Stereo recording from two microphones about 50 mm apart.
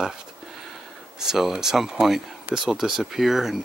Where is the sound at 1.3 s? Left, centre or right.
Centre.